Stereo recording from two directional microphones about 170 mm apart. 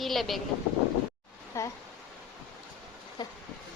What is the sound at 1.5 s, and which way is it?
Speech, 15° left (ahead or behind).